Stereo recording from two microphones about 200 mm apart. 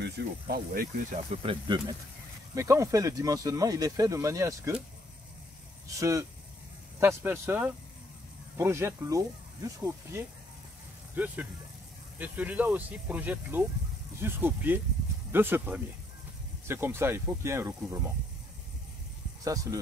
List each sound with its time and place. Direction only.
0.0 s speech: 50° right (ahead or behind)
1.3 s speech: 25° right (ahead or behind)
5.9 s speech: 15° right (ahead or behind)
12.2 s speech: 5° right (ahead or behind)
19.4 s speech: 15° right (ahead or behind)